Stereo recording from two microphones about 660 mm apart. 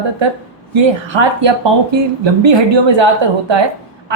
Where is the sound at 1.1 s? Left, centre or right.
Right.